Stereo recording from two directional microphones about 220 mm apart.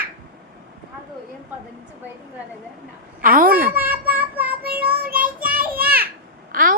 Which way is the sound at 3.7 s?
10° right (ahead or behind).